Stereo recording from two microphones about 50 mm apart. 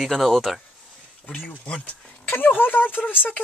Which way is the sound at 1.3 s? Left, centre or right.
Left.